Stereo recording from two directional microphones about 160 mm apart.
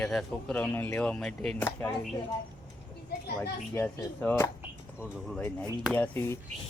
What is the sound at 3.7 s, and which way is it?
Speech, 10° left (ahead or behind).